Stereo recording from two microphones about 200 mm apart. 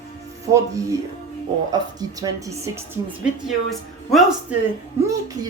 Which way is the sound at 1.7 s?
20° right (ahead or behind).